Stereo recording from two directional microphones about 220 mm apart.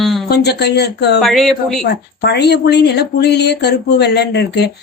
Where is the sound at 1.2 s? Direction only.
Centre (ahead or behind).